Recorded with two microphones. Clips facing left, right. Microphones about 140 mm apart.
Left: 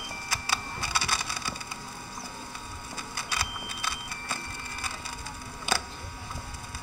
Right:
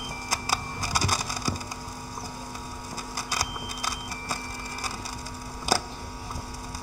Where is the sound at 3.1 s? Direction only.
40° right (ahead or behind).